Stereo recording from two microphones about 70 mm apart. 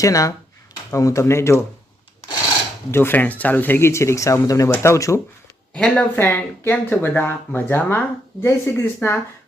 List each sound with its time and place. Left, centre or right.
0.0 s speech: left
2.9 s speech: left
5.7 s speech: centre
6.1 s speech: left